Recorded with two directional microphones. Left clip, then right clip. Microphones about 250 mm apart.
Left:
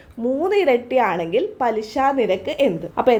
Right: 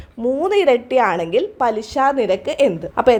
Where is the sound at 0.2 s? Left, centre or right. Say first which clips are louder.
Right 2 dB; right.